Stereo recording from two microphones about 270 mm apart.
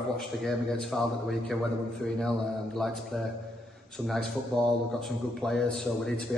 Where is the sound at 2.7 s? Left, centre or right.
Centre.